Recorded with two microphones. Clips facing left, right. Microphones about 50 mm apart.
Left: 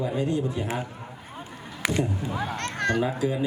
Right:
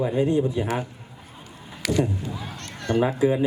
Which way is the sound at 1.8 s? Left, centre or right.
Left.